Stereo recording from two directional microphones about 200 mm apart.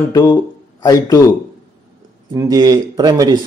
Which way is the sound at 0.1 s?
15° left (ahead or behind).